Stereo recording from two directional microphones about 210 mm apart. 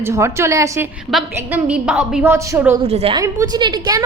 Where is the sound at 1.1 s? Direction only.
5° right (ahead or behind).